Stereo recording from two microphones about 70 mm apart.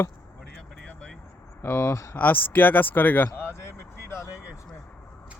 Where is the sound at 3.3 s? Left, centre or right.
Left.